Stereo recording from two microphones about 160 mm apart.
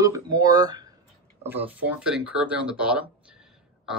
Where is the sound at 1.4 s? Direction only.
10° right (ahead or behind).